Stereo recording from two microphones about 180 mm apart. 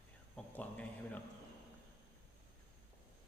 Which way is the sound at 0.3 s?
10° left (ahead or behind).